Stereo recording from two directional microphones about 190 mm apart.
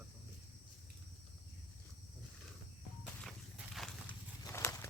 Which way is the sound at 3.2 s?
Centre (ahead or behind).